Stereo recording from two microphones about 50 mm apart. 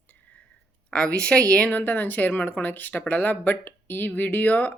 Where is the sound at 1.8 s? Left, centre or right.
Left.